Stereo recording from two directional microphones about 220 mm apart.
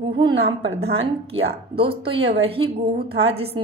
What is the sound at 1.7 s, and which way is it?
Speech, 25° right (ahead or behind).